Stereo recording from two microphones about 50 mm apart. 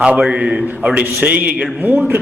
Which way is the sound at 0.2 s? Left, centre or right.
Centre.